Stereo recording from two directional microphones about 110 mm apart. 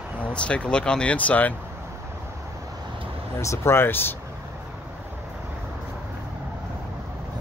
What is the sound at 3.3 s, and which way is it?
Speech, 25° left (ahead or behind).